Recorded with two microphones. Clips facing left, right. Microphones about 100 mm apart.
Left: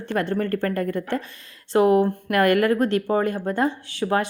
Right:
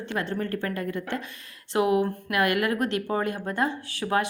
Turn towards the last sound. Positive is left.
turn(degrees=30)  # may be behind; listen again after turning